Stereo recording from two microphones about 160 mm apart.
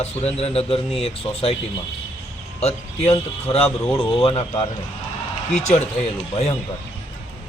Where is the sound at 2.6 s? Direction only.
40° left (ahead or behind).